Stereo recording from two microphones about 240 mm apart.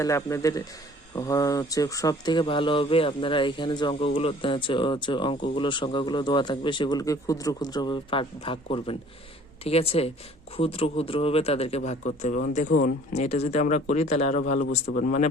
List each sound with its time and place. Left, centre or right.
0.0 s a man's voice: centre; by 15.3 s left